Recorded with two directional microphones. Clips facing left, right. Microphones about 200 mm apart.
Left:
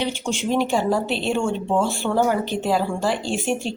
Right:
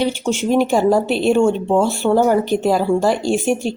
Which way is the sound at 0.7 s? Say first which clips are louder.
Right 6 dB; 45° right (ahead or behind).